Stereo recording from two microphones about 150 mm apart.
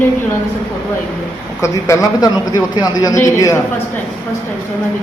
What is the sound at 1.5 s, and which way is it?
Speech, 20° left (ahead or behind).